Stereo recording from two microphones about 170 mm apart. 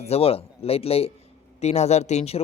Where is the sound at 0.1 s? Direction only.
35° left (ahead or behind).